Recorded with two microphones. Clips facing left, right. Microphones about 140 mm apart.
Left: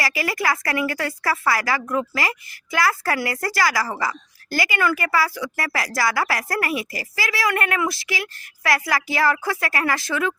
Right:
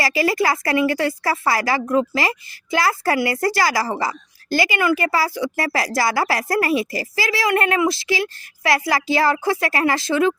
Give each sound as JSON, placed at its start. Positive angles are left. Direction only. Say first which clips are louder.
{"t": 0.0, "sound": "a woman's voice", "louder": "right 5 dB", "side_deg": -30}